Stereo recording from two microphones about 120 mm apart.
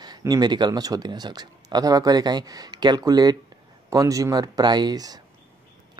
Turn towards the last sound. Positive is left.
turn(degrees=-35)  # may be behind; listen again after turning